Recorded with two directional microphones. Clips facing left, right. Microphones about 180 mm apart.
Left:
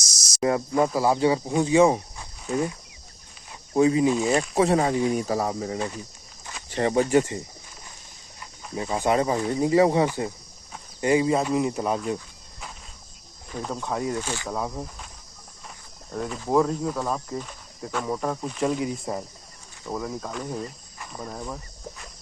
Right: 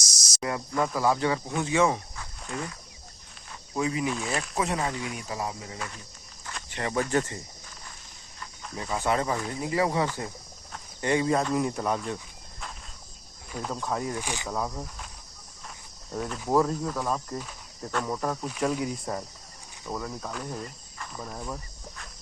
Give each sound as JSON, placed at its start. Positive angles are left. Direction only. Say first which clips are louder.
{"t": 0.4, "sound": "speech", "louder": "left 7 dB", "side_deg": 25}
{"t": 3.8, "sound": "speech", "louder": "left 9 dB", "side_deg": 30}
{"t": 7.1, "sound": "speech", "louder": "left 6 dB", "side_deg": 15}
{"t": 8.7, "sound": "speech", "louder": "left 4 dB", "side_deg": 20}
{"t": 10.7, "sound": "speech", "louder": "left 5 dB", "side_deg": 10}
{"t": 13.5, "sound": "speech", "louder": "left 2 dB", "side_deg": 0}
{"t": 14.2, "sound": "speech", "louder": "left 3 dB", "side_deg": -15}
{"t": 14.5, "sound": "speech", "louder": "left 1 dB", "side_deg": 10}
{"t": 16.1, "sound": "speech", "louder": "left 2 dB", "side_deg": 0}
{"t": 19.1, "sound": "speech", "louder": "left 2 dB", "side_deg": 15}